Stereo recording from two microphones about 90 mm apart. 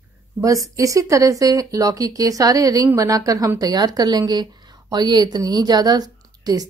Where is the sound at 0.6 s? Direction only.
40° right (ahead or behind).